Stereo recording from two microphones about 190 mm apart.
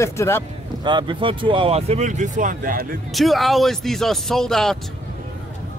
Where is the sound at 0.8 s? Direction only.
25° right (ahead or behind); by 2.8 s 45° right (ahead or behind).